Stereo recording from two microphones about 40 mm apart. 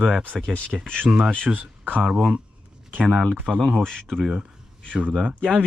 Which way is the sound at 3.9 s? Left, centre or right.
Centre.